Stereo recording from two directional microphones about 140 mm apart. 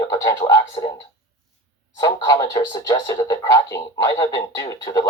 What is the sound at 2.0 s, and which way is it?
Speech, 25° left (ahead or behind).